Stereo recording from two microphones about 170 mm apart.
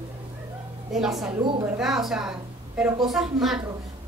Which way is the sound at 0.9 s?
Centre (ahead or behind).